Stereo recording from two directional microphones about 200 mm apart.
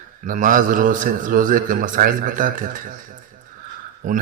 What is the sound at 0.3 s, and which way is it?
A man's voice, 40° right (ahead or behind).